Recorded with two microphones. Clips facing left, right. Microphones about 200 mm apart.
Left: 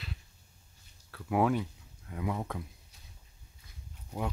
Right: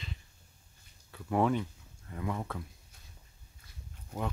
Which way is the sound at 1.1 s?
5° left (ahead or behind).